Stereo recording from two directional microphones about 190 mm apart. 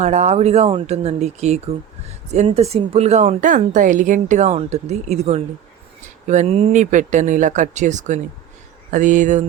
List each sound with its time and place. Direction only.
0.0 s speech: 35° right (ahead or behind)